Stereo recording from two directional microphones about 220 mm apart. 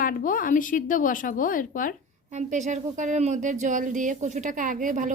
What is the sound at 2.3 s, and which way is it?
A woman's voice, 35° right (ahead or behind).